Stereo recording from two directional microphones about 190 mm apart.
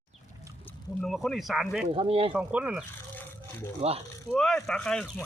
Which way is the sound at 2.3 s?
5° right (ahead or behind).